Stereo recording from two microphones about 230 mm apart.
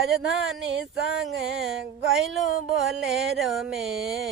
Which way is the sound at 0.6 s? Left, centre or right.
Right.